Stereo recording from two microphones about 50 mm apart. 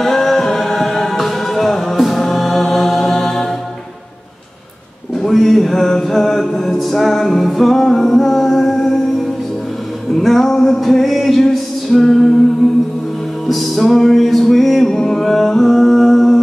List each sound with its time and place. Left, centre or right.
0.0 s a capella: centre
5.2 s mantra: centre
10.1 s music: centre
13.5 s music: centre